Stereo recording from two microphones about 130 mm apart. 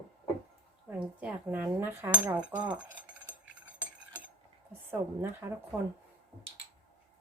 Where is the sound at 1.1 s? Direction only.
10° right (ahead or behind).